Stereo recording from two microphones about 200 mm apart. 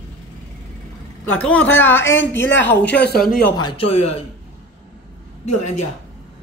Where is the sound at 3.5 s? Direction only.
25° left (ahead or behind).